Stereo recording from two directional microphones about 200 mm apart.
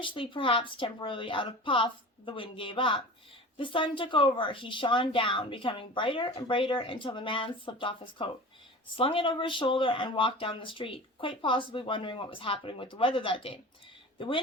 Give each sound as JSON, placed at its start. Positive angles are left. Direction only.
{"t": 0.0, "sound": "a woman's voice", "side_deg": 25}